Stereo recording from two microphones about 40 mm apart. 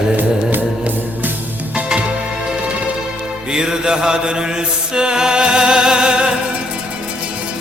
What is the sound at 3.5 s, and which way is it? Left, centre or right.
Mantra, centre.